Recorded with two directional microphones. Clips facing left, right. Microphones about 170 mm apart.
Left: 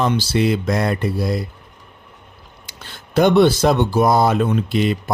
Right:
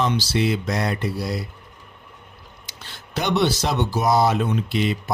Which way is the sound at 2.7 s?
50° left (ahead or behind).